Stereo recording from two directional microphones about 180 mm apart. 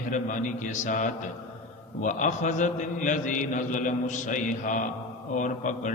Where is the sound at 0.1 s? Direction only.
45° left (ahead or behind).